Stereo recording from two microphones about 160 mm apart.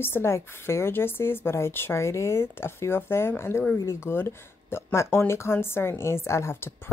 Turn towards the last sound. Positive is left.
turn(degrees=15)  # may be behind; listen again after turning